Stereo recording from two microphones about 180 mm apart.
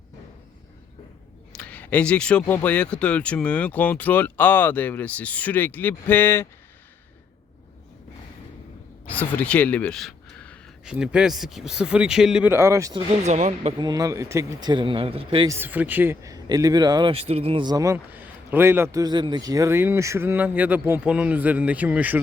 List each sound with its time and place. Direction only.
1.5 s speech: 10° left (ahead or behind)
9.0 s speech: 10° left (ahead or behind)
10.8 s speech: 5° right (ahead or behind)
13.2 s speech: 40° right (ahead or behind)
13.7 s speech: 20° right (ahead or behind)
15.4 s speech: 10° right (ahead or behind)